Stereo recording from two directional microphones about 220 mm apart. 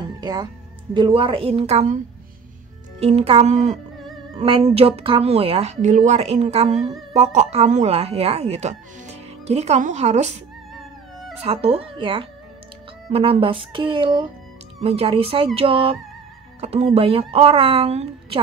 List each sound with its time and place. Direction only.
0.2 s a woman's voice: 20° right (ahead or behind)
3.0 s a woman's voice: 30° right (ahead or behind)
10.7 s music: centre (ahead or behind)
11.4 s a woman's voice: 25° right (ahead or behind)